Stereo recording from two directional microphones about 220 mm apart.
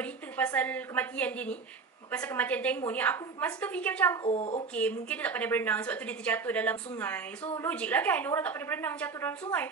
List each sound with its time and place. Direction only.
0.0 s a woman's voice: 5° left (ahead or behind)
4.3 s speech: 30° left (ahead or behind)
4.7 s a woman's voice: 5° left (ahead or behind)